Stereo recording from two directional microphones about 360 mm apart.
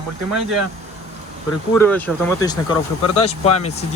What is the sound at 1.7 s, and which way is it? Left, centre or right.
Speech, centre.